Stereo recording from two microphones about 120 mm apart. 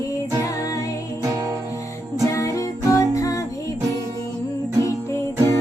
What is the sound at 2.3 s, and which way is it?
Music, 25° left (ahead or behind).